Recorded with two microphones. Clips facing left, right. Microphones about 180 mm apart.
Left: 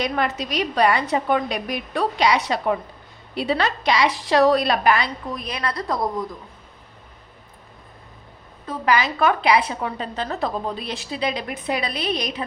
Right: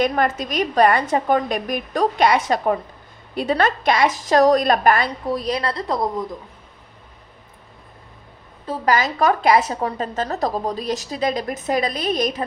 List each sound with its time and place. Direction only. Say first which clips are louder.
0.0 s a woman's voice: right 4 dB; 50° right (ahead or behind)
5.2 s a woman's voice: right 6 dB; 35° right (ahead or behind)
8.6 s a woman's voice: right 1 dB; 30° right (ahead or behind)